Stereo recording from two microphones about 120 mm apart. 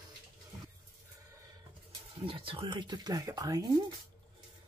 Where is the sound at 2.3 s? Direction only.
45° right (ahead or behind); by 3.7 s 30° right (ahead or behind).